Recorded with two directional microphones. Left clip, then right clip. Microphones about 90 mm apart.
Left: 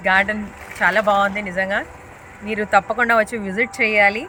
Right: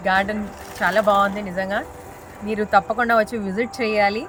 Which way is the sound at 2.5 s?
25° right (ahead or behind).